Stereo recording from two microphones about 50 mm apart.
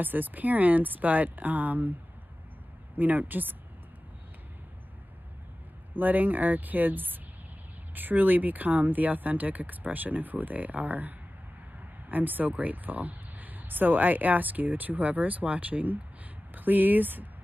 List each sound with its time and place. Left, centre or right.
0.0 s speech: right
3.0 s speech: right
5.9 s speech: right